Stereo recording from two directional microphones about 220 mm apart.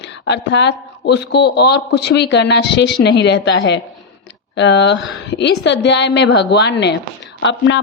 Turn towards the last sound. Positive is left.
turn(degrees=55)  # may be behind; listen again after turning